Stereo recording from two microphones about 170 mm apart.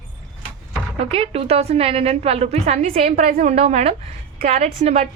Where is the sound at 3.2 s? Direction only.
50° right (ahead or behind).